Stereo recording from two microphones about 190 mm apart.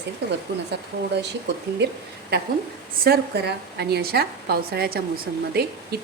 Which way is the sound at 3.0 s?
55° right (ahead or behind).